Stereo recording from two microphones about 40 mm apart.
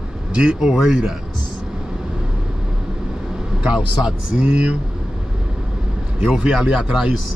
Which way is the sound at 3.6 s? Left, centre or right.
Right.